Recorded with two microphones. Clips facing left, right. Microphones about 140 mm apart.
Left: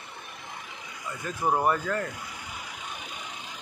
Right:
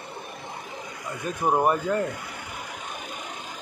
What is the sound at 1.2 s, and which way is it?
Speech, 20° right (ahead or behind).